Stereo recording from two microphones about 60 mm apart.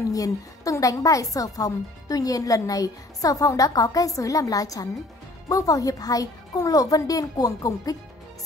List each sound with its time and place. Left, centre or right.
0.1 s a woman's voice: left